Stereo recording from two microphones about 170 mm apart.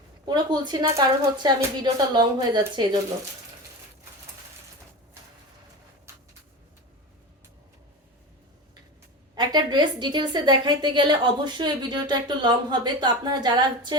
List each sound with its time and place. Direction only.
0.3 s a woman's voice: 25° right (ahead or behind)
9.3 s a woman's voice: 25° right (ahead or behind)